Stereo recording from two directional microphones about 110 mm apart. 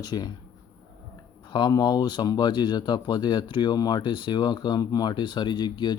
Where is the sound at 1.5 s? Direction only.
40° left (ahead or behind).